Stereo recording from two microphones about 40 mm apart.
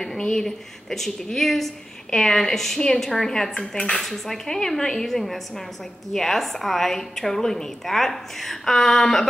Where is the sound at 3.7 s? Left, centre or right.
Left.